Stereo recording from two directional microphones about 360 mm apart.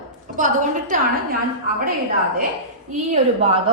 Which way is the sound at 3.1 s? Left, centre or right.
Centre.